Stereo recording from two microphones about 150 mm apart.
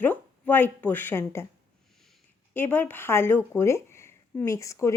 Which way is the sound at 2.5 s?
10° left (ahead or behind).